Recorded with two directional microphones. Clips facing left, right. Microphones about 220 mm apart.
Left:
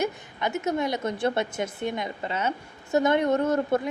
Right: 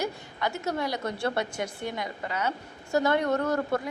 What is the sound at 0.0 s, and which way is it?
A woman's voice, 20° left (ahead or behind).